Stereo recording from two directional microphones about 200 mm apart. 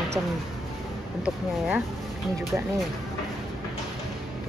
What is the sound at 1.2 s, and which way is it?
Speech, centre (ahead or behind).